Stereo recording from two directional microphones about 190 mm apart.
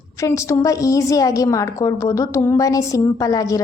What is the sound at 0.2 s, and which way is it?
A woman's voice, 15° left (ahead or behind).